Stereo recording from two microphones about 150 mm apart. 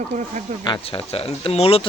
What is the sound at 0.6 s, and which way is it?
Speech, 35° left (ahead or behind).